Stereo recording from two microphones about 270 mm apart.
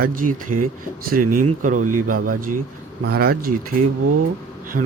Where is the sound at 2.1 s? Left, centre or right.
Right.